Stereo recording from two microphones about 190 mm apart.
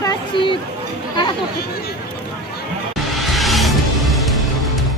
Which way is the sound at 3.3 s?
Centre (ahead or behind).